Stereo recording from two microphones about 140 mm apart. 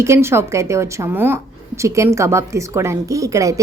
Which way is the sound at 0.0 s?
20° right (ahead or behind).